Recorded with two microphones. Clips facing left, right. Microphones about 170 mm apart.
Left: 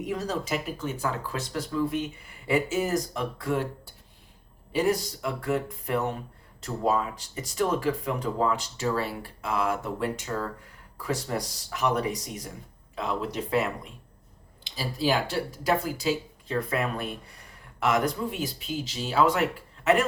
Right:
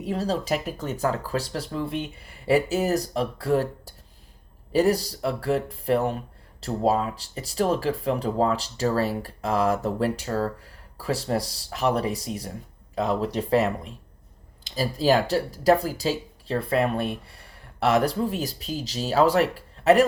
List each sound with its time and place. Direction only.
0.0 s speech: 30° right (ahead or behind)